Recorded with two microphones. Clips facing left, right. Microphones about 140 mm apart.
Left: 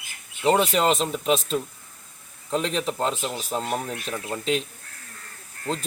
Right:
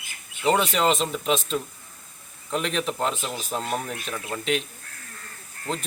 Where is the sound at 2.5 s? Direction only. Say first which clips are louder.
Left 1 dB; 30° left (ahead or behind).